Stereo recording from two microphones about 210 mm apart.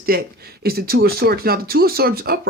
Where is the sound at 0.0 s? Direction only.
45° right (ahead or behind).